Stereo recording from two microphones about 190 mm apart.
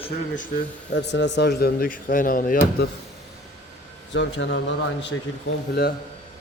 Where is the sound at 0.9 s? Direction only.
65° left (ahead or behind); by 2.9 s 50° left (ahead or behind).